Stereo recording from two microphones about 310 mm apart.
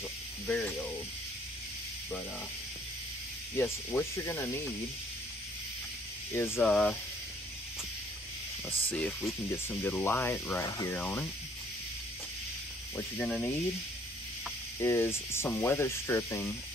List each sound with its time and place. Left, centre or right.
0.5 s speech: centre
3.5 s speech: centre
6.3 s speech: centre
8.9 s speech: centre
12.9 s speech: centre
14.8 s speech: centre